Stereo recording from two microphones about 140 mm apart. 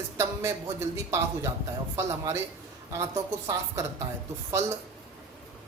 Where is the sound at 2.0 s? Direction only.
20° right (ahead or behind).